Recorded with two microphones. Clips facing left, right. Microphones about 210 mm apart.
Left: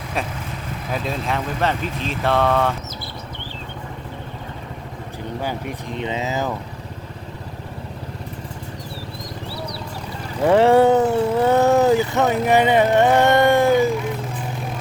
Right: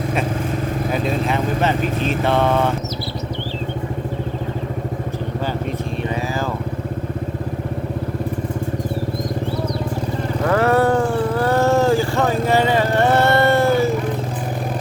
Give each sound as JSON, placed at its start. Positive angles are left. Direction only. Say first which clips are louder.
{"t": 1.0, "sound": "speech", "louder": "right 2 dB", "side_deg": 0}
{"t": 6.0, "sound": "vehicle", "louder": "left 2 dB", "side_deg": 20}
{"t": 10.4, "sound": "vehicle", "louder": "left 3 dB", "side_deg": 25}